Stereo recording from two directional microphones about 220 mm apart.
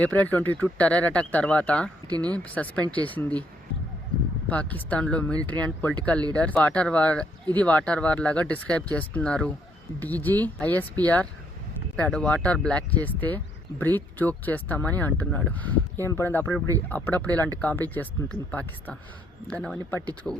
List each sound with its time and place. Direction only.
0.0 s speech: 5° left (ahead or behind)
2.0 s speech: 20° right (ahead or behind)
2.3 s speech: 5° left (ahead or behind)
4.4 s speech: 5° left (ahead or behind)